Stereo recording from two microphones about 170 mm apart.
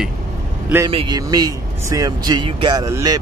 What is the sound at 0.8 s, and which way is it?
Speech, 30° right (ahead or behind).